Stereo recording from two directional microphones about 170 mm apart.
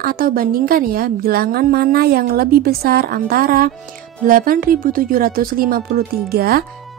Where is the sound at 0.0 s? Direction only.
60° right (ahead or behind).